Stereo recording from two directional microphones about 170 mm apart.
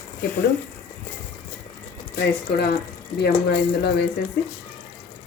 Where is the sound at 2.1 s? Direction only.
70° left (ahead or behind).